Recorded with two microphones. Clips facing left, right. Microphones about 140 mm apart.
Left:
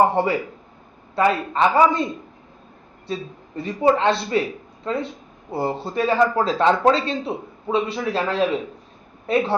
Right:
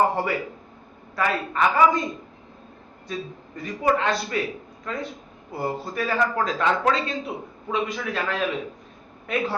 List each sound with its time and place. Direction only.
0.2 s a man's voice: 25° left (ahead or behind)
3.1 s a man's voice: 30° left (ahead or behind)